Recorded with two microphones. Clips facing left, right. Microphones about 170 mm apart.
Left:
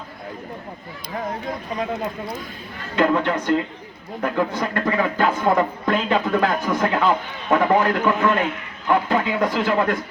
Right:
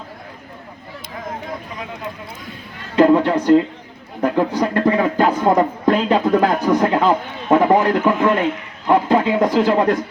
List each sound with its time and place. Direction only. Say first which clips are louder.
2.9 s speech: right 6 dB; 35° right (ahead or behind)